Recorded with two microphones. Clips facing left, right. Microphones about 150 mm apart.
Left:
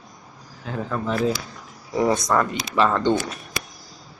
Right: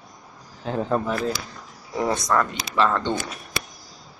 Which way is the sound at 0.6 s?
25° right (ahead or behind).